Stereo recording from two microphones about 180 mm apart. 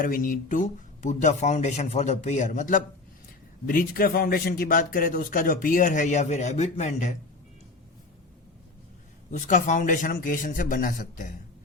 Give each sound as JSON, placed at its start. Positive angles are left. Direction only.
{"t": 0.0, "sound": "speech", "side_deg": 50}
{"t": 9.3, "sound": "speech", "side_deg": 45}